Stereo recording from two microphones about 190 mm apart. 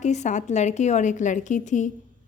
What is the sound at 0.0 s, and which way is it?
A woman's voice, 40° left (ahead or behind).